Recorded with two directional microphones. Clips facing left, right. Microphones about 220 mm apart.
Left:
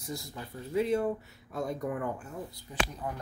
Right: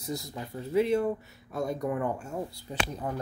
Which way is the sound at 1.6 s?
30° right (ahead or behind).